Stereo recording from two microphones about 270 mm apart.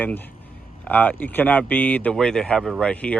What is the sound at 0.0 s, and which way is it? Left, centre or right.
Speech, centre.